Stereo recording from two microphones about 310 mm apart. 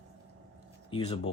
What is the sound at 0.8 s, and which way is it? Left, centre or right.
Speech, centre.